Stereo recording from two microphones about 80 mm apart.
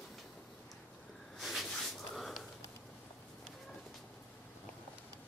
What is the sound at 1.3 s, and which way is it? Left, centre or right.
Snort, centre.